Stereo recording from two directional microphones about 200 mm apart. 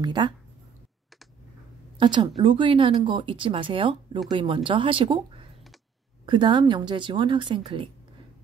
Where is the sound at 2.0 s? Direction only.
25° right (ahead or behind).